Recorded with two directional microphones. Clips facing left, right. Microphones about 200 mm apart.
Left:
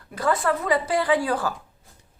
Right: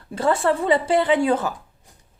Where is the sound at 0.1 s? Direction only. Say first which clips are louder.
Right 3 dB; 25° right (ahead or behind).